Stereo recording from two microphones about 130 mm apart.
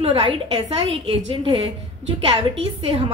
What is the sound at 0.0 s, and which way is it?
A woman's voice, 45° right (ahead or behind).